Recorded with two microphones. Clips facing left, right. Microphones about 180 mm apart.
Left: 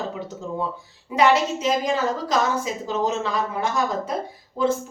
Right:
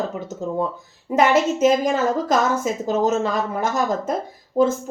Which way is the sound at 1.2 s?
50° right (ahead or behind).